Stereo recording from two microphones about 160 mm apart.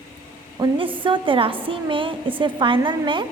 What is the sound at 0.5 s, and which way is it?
A woman's voice, 30° right (ahead or behind).